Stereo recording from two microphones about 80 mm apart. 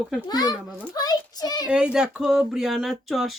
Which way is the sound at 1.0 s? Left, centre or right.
Left.